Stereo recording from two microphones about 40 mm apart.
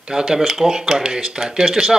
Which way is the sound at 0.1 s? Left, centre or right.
Centre.